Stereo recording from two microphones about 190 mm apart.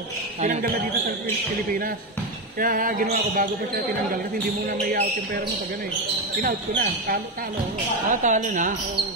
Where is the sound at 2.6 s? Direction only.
45° right (ahead or behind).